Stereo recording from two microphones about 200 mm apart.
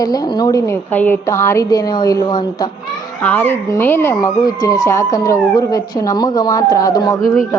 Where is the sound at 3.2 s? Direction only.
10° left (ahead or behind).